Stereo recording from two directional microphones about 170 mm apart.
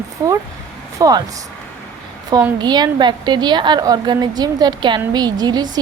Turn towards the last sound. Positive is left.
turn(degrees=-25)  # may be behind; listen again after turning